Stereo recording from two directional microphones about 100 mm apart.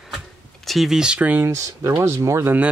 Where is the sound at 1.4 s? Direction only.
30° right (ahead or behind).